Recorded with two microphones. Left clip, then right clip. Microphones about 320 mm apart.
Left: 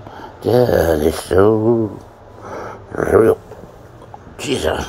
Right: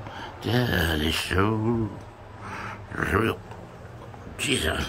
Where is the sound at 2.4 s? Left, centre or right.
Centre.